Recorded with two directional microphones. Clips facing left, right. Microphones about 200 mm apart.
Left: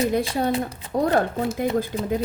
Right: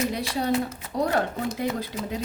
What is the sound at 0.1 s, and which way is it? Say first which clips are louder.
Speech: left 3 dB; 50° left (ahead or behind).